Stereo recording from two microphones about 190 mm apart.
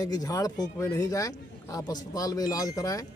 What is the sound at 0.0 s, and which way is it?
A man's voice, 20° left (ahead or behind).